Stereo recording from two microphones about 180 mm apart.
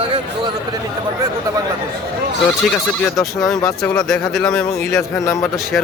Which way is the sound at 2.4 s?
Centre (ahead or behind).